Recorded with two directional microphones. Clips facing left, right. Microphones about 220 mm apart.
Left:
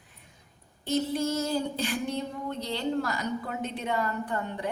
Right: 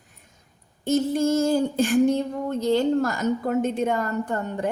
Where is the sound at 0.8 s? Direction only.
45° right (ahead or behind).